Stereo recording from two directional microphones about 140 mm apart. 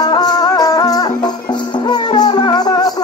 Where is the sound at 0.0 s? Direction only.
30° left (ahead or behind).